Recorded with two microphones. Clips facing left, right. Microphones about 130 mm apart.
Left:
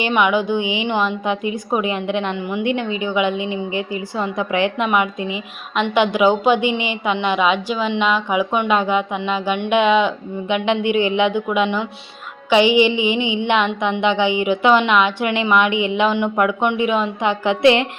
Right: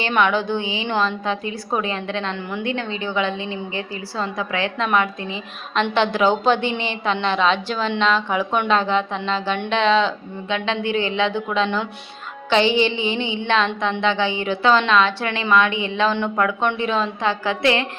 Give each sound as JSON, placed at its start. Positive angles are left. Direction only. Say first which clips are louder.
{"t": 0.0, "sound": "a woman's voice", "louder": "left 2 dB", "side_deg": 10}
{"t": 13.7, "sound": "a woman's voice", "louder": "left 3 dB", "side_deg": 5}
{"t": 14.0, "sound": "a woman's voice", "louder": "left 5 dB", "side_deg": 15}